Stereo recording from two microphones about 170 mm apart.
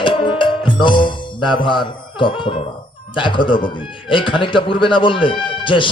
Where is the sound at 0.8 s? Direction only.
30° left (ahead or behind).